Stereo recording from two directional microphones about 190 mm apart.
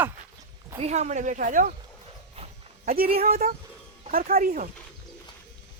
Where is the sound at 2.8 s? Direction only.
50° right (ahead or behind).